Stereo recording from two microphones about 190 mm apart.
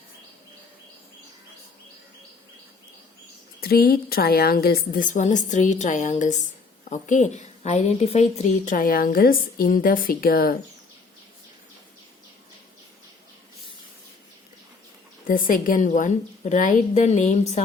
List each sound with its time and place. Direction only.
3.6 s a woman's voice: 50° left (ahead or behind)
15.3 s a woman's voice: 45° left (ahead or behind)